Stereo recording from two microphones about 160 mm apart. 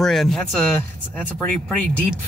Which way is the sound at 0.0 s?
Centre (ahead or behind).